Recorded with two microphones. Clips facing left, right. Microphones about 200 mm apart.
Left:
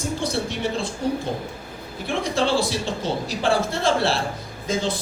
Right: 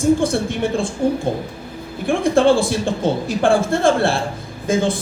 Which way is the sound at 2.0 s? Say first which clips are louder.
Right 8 dB; 50° right (ahead or behind).